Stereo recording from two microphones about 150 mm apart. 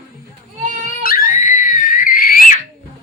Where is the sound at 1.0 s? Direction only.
70° left (ahead or behind).